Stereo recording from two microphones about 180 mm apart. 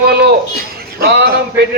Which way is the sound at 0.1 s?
60° right (ahead or behind).